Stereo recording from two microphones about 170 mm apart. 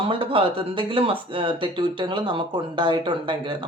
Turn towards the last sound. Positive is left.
turn(degrees=-30)  # may be behind; listen again after turning